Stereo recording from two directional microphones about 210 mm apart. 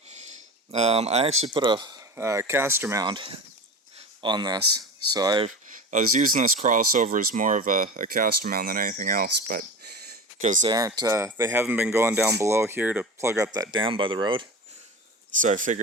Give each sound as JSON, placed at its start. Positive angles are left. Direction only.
{"t": 0.7, "sound": "speech", "side_deg": -30}
{"t": 5.9, "sound": "speech", "side_deg": -40}
{"t": 10.6, "sound": "speech", "side_deg": -20}
{"t": 15.4, "sound": "speech", "side_deg": -40}